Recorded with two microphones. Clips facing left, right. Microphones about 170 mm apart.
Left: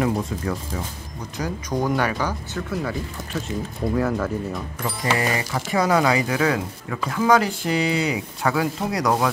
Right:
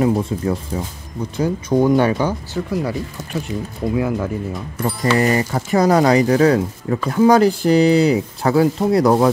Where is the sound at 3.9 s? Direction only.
15° right (ahead or behind).